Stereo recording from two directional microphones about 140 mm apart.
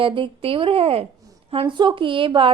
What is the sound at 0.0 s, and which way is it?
A woman's voice, 40° right (ahead or behind).